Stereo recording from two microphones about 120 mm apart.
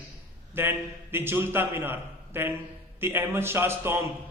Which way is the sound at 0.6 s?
20° right (ahead or behind).